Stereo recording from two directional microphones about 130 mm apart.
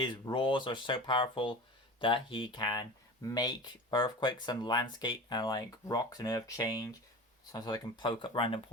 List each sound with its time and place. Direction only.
0.0 s speech: 35° left (ahead or behind)